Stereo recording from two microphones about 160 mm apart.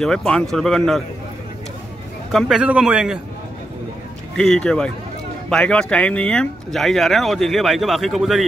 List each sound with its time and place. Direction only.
0.0 s speech: 5° left (ahead or behind)
2.3 s speech: 5° right (ahead or behind)
4.4 s speech: 5° left (ahead or behind)